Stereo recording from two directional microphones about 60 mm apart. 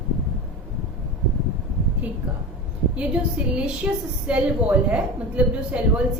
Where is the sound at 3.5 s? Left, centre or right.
Centre.